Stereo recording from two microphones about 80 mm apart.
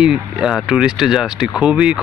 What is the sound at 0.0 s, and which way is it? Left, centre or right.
Speech, centre.